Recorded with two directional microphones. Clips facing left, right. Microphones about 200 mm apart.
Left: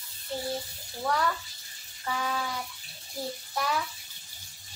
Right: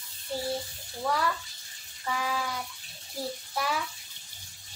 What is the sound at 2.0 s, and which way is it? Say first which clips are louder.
Speech: even; 5° right (ahead or behind).